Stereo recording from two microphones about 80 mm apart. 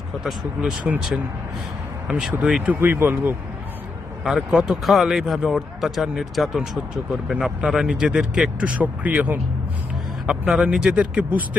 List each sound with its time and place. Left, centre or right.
0.6 s speech: centre
2.1 s speech: centre
2.6 s speech: right
4.2 s speech: centre; by 9.4 s right
10.2 s speech: centre